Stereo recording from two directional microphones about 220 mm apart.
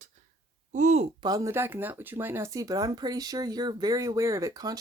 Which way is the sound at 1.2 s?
15° right (ahead or behind).